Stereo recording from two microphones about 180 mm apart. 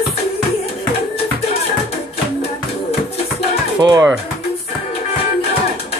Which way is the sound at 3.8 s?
20° right (ahead or behind).